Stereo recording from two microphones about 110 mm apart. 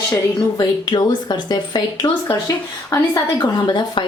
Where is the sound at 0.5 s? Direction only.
40° left (ahead or behind).